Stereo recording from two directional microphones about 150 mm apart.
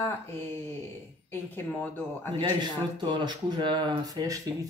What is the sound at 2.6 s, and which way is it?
Speech, 30° right (ahead or behind).